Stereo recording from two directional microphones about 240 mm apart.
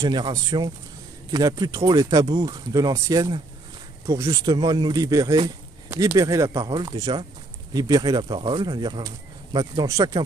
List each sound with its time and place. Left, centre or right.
0.0 s speech: centre